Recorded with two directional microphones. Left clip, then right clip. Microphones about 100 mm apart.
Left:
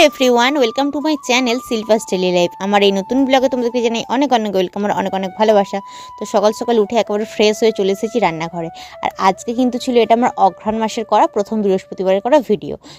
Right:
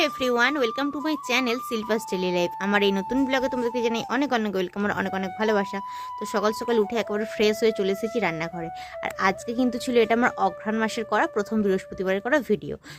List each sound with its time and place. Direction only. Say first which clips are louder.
0.0 s a woman's voice: left 11 dB; 90° left; by 12.7 s 40° left (ahead or behind)